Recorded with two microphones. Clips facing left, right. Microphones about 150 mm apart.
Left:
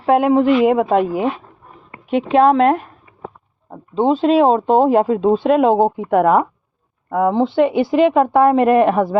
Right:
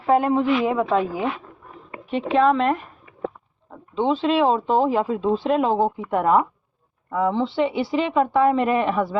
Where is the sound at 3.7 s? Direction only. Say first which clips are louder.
Left 6 dB; 40° left (ahead or behind).